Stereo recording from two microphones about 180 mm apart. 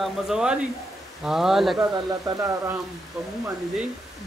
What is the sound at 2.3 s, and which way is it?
Speech, 15° right (ahead or behind).